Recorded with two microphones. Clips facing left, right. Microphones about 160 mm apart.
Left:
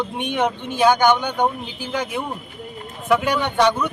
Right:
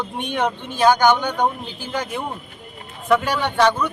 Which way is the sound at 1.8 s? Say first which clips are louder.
Left 1 dB; 10° left (ahead or behind).